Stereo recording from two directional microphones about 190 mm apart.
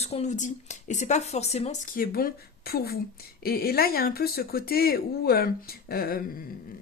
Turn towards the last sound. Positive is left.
turn(degrees=55)  # may be behind; listen again after turning